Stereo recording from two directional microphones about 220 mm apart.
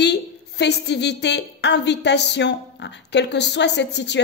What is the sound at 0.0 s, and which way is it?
A woman's voice, 50° left (ahead or behind).